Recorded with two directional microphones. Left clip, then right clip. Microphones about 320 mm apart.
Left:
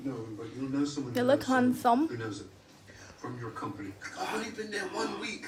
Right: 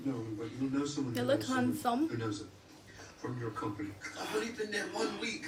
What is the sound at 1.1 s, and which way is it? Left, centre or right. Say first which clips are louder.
Speech: left 7 dB; centre.